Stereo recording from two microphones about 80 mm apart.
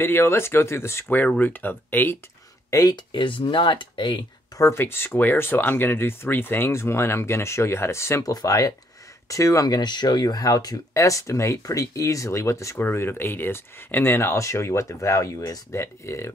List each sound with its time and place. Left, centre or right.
0.0 s speech: left
1.1 s speech: left
2.7 s speech: left
3.1 s speech: left
4.6 s speech: left
8.2 s speech: left
10.9 s speech: left